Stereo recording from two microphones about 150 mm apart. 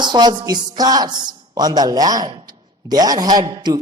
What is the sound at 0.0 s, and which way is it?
A woman's voice, 30° right (ahead or behind).